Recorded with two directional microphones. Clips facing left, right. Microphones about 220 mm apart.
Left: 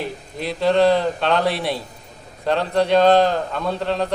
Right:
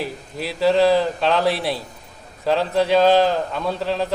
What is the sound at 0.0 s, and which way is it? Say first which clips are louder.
A man's voice: even; 5° right (ahead or behind).